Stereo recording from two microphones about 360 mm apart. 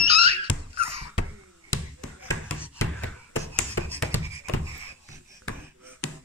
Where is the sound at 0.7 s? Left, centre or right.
Centre.